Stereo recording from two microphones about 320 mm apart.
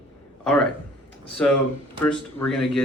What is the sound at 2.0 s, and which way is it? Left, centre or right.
Speech, centre.